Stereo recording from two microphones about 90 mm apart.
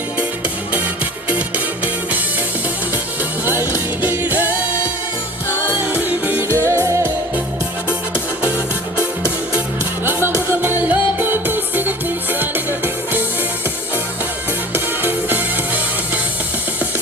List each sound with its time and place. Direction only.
1.3 s music: 15° right (ahead or behind)
3.4 s music: 25° right (ahead or behind)
6.1 s music: 20° right (ahead or behind)
7.9 s music: 15° right (ahead or behind)
9.6 s music: 25° right (ahead or behind)
14.7 s music: 20° right (ahead or behind)